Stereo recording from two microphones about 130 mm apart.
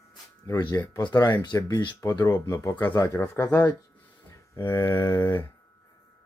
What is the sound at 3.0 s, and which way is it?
Speech, 25° left (ahead or behind).